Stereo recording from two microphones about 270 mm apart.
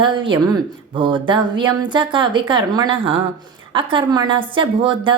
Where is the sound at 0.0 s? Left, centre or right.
Centre.